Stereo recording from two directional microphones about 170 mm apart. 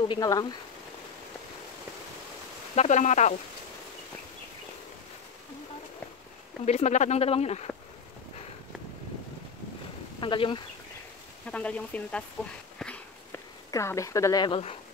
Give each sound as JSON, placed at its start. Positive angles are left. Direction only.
{"t": 0.1, "sound": "speech", "side_deg": 25}
{"t": 2.7, "sound": "speech", "side_deg": 40}
{"t": 6.6, "sound": "speech", "side_deg": 40}
{"t": 10.2, "sound": "speech", "side_deg": 30}
{"t": 11.4, "sound": "speech", "side_deg": 5}
{"t": 12.7, "sound": "a sound", "side_deg": 5}
{"t": 13.7, "sound": "speech", "side_deg": 20}